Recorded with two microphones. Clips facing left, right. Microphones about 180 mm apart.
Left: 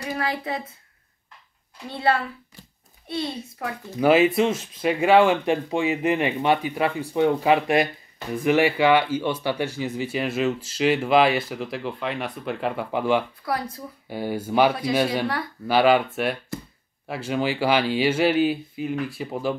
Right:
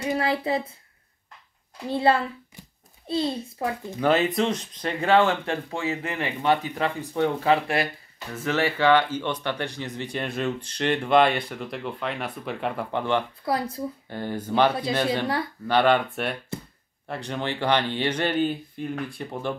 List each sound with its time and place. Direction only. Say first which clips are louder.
0.0 s speech: right 3 dB; 25° right (ahead or behind)
2.0 s a child's voice: right 1 dB; 25° right (ahead or behind)
4.0 s speech: left 4 dB; 10° left (ahead or behind)
13.5 s a child's voice: right 3 dB; 25° right (ahead or behind)
14.0 s speech: left 3 dB; 10° left (ahead or behind)